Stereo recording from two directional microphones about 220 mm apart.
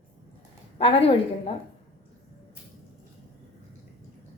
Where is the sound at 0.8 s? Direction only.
25° left (ahead or behind).